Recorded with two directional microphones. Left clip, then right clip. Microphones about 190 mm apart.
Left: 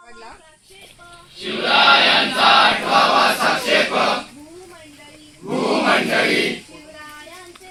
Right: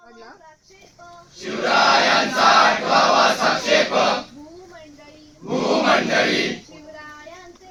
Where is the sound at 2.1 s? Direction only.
10° right (ahead or behind).